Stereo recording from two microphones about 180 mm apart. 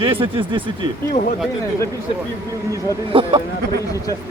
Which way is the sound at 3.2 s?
30° right (ahead or behind).